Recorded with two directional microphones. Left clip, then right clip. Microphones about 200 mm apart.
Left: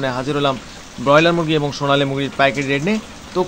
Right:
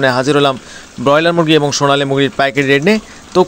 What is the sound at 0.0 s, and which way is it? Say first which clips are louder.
A man's voice: right 8 dB; 40° right (ahead or behind).